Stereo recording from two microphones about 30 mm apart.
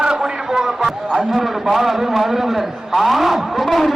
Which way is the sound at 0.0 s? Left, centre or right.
Right.